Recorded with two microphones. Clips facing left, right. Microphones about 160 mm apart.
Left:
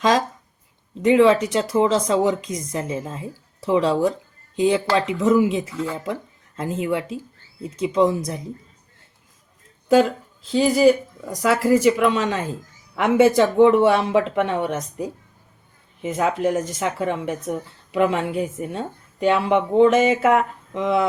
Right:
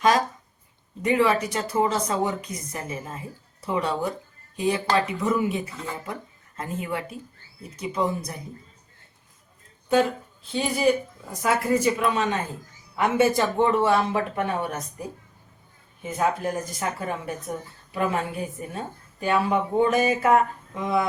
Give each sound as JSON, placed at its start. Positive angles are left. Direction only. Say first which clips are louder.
{"t": 1.0, "sound": "speech", "louder": "left 7 dB", "side_deg": 90}
{"t": 9.9, "sound": "speech", "louder": "left 5 dB", "side_deg": 90}
{"t": 16.0, "sound": "speech", "louder": "left 3 dB", "side_deg": 90}